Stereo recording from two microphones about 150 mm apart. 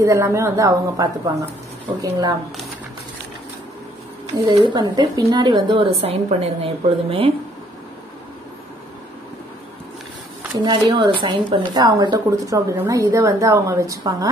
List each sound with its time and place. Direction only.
0.0 s speech: 20° right (ahead or behind)
4.6 s speech: 25° right (ahead or behind)
5.9 s a woman's voice: 45° right (ahead or behind)
10.6 s speech: 30° right (ahead or behind)